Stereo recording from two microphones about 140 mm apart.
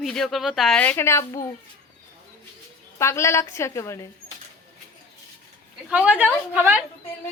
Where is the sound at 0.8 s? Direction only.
15° left (ahead or behind).